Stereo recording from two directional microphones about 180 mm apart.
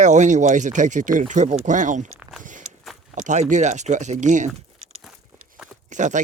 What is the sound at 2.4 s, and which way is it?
Walk, 45° right (ahead or behind).